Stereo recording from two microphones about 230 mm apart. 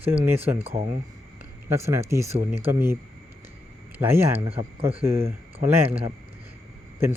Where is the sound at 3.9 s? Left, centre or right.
Centre.